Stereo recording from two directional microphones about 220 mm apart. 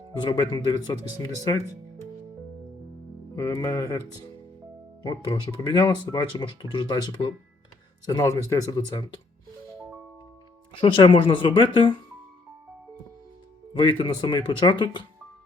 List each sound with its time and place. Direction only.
0.2 s speech: 20° left (ahead or behind)
3.3 s speech: 15° left (ahead or behind)
10.7 s speech: 20° left (ahead or behind)
13.7 s speech: 20° left (ahead or behind)